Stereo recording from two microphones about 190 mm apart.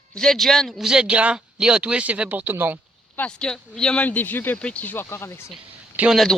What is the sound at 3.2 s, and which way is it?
Speech, 5° left (ahead or behind).